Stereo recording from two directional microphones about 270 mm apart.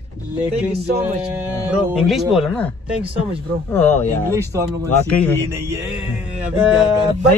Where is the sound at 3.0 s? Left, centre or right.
Right.